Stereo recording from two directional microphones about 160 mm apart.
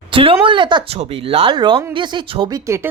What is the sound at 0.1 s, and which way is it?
Speech, 35° right (ahead or behind).